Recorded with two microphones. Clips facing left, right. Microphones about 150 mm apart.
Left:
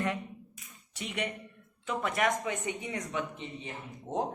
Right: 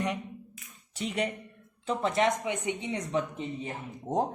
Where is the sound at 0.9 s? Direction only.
35° right (ahead or behind).